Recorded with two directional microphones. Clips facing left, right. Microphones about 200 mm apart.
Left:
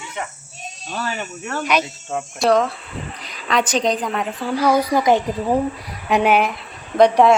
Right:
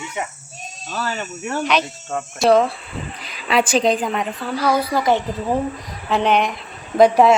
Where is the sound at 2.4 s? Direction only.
5° right (ahead or behind).